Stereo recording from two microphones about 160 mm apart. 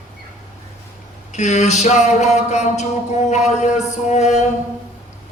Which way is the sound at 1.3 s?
45° left (ahead or behind).